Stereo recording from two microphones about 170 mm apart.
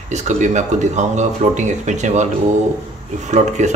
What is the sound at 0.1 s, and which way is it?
A man's voice, 45° right (ahead or behind).